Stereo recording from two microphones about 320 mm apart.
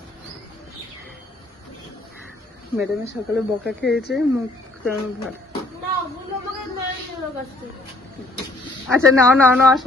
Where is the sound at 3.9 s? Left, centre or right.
Left.